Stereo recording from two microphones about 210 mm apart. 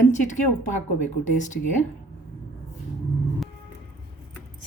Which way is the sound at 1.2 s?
35° left (ahead or behind).